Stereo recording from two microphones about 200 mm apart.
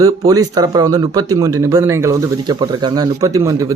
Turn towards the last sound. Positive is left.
turn(degrees=-15)  # may be behind; listen again after turning